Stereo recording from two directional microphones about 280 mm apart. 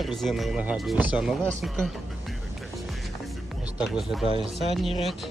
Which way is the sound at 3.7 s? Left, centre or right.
Centre.